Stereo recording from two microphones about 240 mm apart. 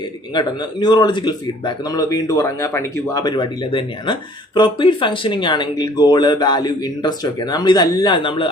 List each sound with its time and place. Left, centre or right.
0.3 s speech: centre